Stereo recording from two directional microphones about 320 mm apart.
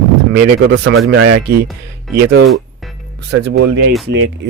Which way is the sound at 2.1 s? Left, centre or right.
Right.